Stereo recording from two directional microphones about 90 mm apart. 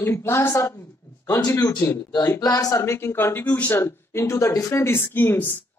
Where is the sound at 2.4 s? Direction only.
40° left (ahead or behind).